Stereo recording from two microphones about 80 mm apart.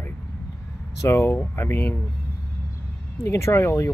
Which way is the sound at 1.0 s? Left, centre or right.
Left.